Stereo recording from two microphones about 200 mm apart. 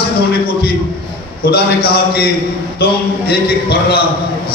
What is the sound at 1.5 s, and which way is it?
A man's voice, 50° left (ahead or behind).